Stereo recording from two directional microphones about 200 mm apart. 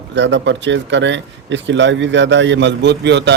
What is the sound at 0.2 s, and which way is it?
Speech, 65° right (ahead or behind).